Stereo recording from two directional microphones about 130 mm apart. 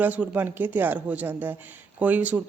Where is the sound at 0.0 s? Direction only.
10° right (ahead or behind).